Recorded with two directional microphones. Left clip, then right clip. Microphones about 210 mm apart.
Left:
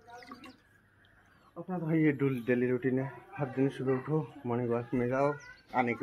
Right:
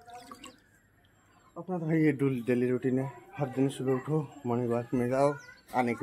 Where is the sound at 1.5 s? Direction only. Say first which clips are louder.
Right 2 dB; 25° right (ahead or behind).